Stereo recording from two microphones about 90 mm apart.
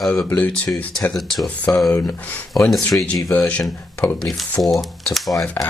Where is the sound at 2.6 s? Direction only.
5° left (ahead or behind).